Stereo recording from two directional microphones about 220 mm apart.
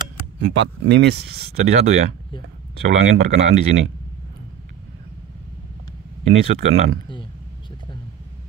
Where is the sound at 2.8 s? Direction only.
30° right (ahead or behind).